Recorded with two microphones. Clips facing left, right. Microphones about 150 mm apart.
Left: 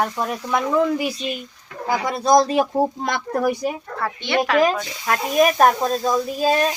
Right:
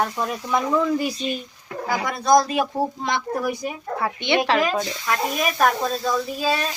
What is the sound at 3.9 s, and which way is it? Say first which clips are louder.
Speech: right 2 dB; 15° right (ahead or behind).